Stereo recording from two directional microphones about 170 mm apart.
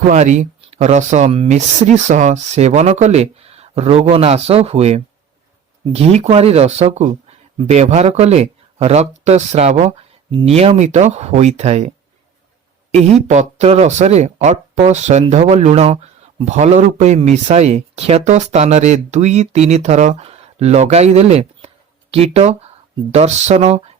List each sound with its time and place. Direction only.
0.1 s speech: 45° right (ahead or behind)
12.9 s speech: 40° right (ahead or behind)